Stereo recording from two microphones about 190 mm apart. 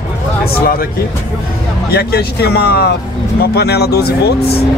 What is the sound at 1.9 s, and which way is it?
Speech, 55° left (ahead or behind).